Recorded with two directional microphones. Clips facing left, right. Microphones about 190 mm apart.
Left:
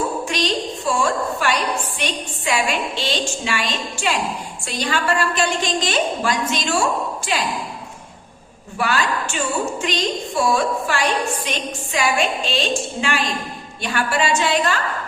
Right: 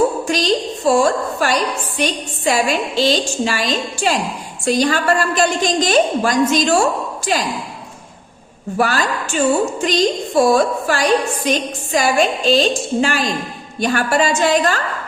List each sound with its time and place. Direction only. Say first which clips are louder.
0.3 s a sound: right 5 dB; 40° right (ahead or behind)
2.0 s a woman's voice: right 5 dB; 40° right (ahead or behind)
8.8 s a woman's voice: right 3 dB; 40° right (ahead or behind)